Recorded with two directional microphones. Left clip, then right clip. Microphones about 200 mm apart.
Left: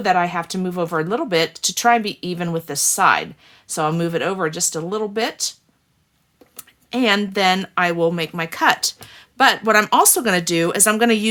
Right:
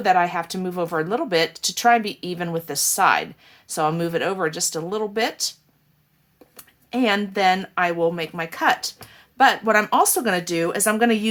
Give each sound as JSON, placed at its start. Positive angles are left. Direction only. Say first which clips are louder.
{"t": 0.0, "sound": "speech", "louder": "left 1 dB", "side_deg": 25}
{"t": 6.6, "sound": "speech", "louder": "left 2 dB", "side_deg": 35}